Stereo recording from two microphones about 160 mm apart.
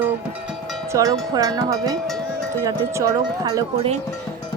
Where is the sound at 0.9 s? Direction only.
20° right (ahead or behind).